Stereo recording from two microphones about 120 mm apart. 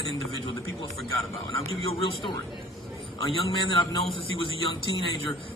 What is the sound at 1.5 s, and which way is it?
Speech, 50° left (ahead or behind).